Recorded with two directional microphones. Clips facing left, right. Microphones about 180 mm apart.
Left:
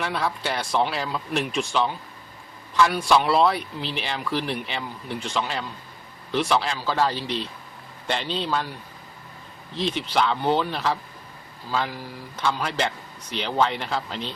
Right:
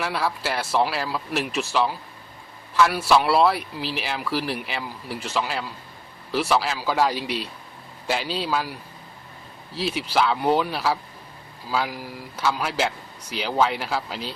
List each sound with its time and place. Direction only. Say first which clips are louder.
0.0 s a man's voice: right 1 dB; 5° right (ahead or behind)